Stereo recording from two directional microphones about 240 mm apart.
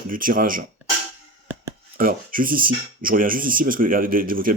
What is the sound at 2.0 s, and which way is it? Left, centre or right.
Speech, right.